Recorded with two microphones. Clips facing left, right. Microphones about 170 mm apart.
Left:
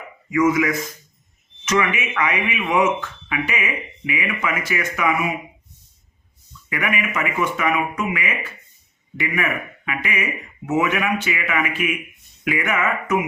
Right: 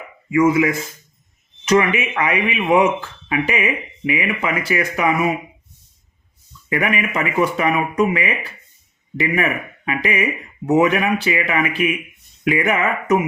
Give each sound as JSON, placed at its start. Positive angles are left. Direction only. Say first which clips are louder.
{"t": 0.3, "sound": "speech", "louder": "right 3 dB", "side_deg": -30}
{"t": 6.7, "sound": "speech", "louder": "right 4 dB", "side_deg": -30}